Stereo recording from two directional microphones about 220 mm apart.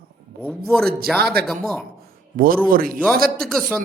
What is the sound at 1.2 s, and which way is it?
A man's voice, 45° right (ahead or behind).